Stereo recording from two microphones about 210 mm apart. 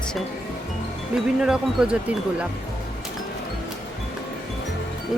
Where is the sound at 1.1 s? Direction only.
5° right (ahead or behind).